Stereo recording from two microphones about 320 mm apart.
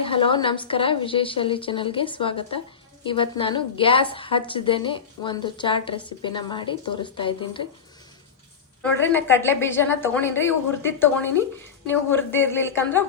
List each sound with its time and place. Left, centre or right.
0.0 s a woman's voice: centre
8.8 s a woman's voice: centre